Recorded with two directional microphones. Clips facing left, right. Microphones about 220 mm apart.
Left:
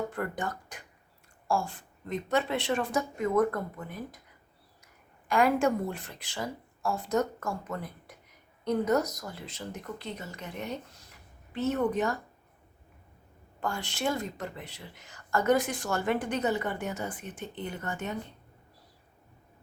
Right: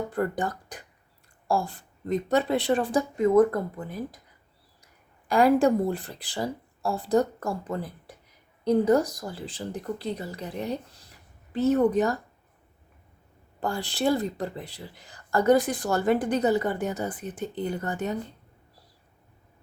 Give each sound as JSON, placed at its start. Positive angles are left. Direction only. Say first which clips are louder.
{"t": 0.1, "sound": "speech", "louder": "right 6 dB", "side_deg": -35}
{"t": 5.3, "sound": "speech", "louder": "right 5 dB", "side_deg": -35}
{"t": 13.6, "sound": "speech", "louder": "right 5 dB", "side_deg": -35}